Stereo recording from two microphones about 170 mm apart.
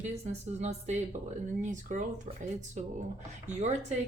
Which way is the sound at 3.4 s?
45° right (ahead or behind).